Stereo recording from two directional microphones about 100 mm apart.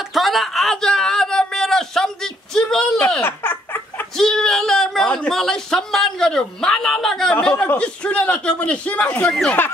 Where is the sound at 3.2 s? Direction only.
20° left (ahead or behind).